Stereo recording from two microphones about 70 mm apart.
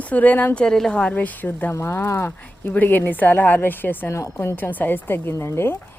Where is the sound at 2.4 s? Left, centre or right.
Left.